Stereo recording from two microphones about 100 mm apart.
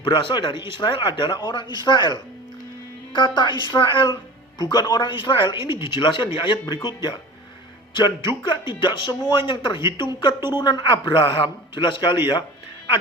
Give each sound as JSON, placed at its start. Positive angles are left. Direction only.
{"t": 0.0, "sound": "speech", "side_deg": 55}
{"t": 4.0, "sound": "speech", "side_deg": 45}